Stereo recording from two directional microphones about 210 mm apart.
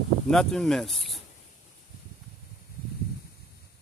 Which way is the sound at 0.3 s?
Centre (ahead or behind).